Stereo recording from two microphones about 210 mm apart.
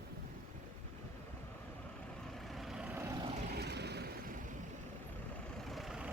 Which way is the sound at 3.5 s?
50° right (ahead or behind).